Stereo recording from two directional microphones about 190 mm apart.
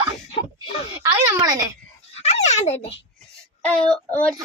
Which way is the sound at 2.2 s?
35° left (ahead or behind).